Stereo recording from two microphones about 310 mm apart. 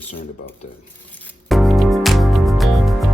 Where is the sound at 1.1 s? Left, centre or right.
Centre.